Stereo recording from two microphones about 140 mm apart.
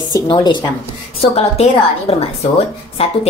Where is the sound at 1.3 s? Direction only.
45° left (ahead or behind).